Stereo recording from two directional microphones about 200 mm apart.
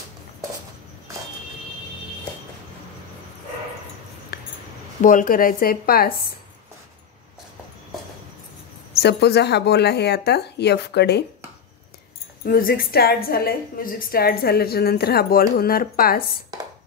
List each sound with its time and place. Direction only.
4.3 s a sound: 55° left (ahead or behind)
5.0 s a woman's voice: 40° left (ahead or behind)
9.0 s speech: 55° left (ahead or behind)
12.4 s a woman's voice: 45° left (ahead or behind)